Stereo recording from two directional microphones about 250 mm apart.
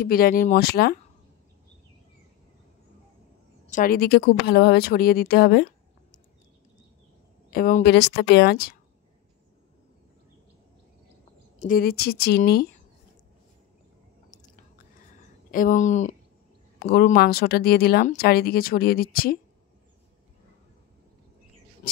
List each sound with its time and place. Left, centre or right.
0.0 s speech: left
3.7 s speech: left
7.5 s speech: left
11.6 s speech: left
15.1 s a sound: left
16.8 s speech: left